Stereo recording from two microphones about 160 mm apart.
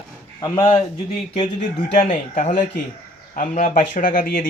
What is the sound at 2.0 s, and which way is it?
A man's voice, 50° left (ahead or behind).